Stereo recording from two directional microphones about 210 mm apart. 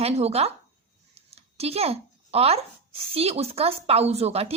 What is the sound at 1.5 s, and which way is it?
A woman's voice, 30° right (ahead or behind).